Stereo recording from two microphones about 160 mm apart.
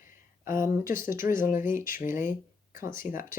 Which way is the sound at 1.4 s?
55° left (ahead or behind).